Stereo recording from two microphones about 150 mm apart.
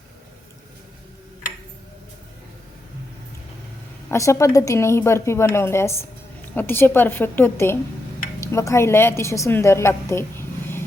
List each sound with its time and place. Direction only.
4.1 s a woman's voice: 20° left (ahead or behind)